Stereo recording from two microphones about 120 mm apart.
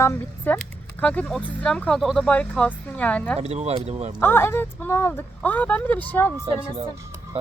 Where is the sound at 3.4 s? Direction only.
60° right (ahead or behind).